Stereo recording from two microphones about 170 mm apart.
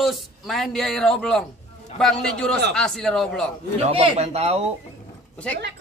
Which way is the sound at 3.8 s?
35° right (ahead or behind).